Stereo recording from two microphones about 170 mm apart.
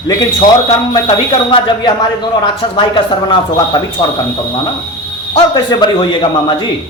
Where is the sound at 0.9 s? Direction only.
25° left (ahead or behind).